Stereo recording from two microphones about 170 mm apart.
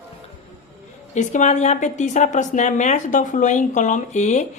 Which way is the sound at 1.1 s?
45° left (ahead or behind).